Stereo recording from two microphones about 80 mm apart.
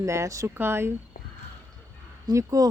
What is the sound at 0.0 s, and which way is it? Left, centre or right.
Speech, right.